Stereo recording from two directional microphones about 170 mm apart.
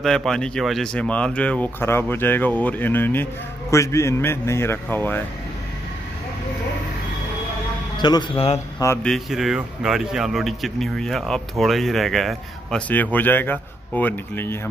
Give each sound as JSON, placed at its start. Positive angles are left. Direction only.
{"t": 0.0, "sound": "speech", "side_deg": 5}
{"t": 8.0, "sound": "speech", "side_deg": 25}
{"t": 8.7, "sound": "speech", "side_deg": 15}
{"t": 9.0, "sound": "a man's voice", "side_deg": 0}